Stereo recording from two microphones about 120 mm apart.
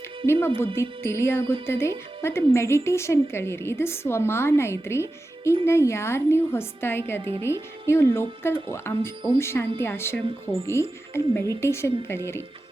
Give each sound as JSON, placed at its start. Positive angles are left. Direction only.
{"t": 0.3, "sound": "a woman's voice", "side_deg": 20}